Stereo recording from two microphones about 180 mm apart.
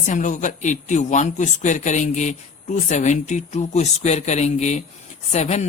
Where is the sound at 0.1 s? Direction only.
45° left (ahead or behind).